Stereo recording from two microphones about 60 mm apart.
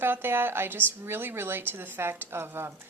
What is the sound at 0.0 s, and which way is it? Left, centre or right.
Speech, right.